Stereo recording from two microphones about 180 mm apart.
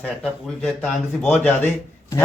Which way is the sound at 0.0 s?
5° left (ahead or behind).